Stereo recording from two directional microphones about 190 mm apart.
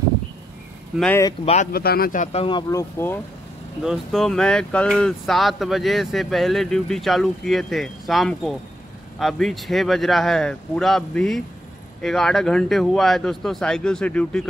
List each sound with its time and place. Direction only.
0.9 s speech: 5° left (ahead or behind)
1.4 s speech: 35° left (ahead or behind)
1.7 s speech: 55° left (ahead or behind)
2.3 s speech: 25° left (ahead or behind)
3.8 s speech: centre (ahead or behind)